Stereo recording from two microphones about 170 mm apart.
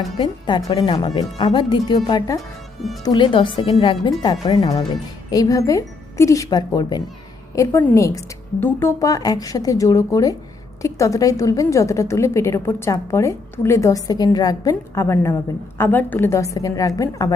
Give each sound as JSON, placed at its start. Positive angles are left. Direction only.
{"t": 0.2, "sound": "a woman's voice", "side_deg": 25}